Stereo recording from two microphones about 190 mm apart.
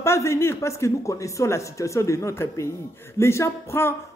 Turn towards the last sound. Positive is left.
turn(degrees=15)  # may be behind; listen again after turning